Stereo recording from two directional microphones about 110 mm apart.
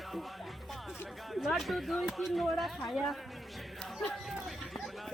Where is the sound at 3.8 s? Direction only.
Centre (ahead or behind).